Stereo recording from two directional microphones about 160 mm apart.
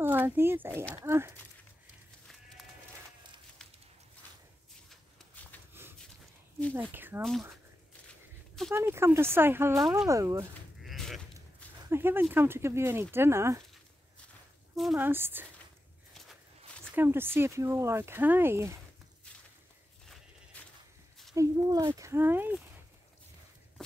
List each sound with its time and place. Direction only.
0.0 s speech: 15° right (ahead or behind)
6.7 s speech: 10° right (ahead or behind)
8.7 s speech: 15° right (ahead or behind)
9.8 s speech: centre (ahead or behind)
10.0 s speech: 20° right (ahead or behind)
10.8 s a sound: centre (ahead or behind)
11.9 s speech: 15° right (ahead or behind)
15.0 s speech: 15° right (ahead or behind)
16.9 s speech: 15° right (ahead or behind)
20.5 s a sound: 10° left (ahead or behind)
21.4 s speech: 20° right (ahead or behind)